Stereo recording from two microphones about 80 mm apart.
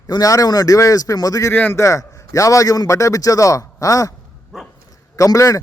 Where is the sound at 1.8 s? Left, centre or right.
Left.